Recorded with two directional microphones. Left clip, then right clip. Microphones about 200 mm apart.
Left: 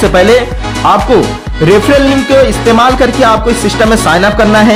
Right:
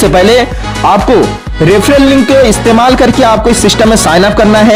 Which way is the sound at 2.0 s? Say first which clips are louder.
Right 3 dB; centre (ahead or behind).